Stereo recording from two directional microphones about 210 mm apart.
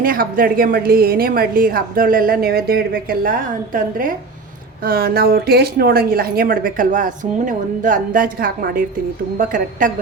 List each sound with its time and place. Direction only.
0.0 s a woman's voice: 45° right (ahead or behind)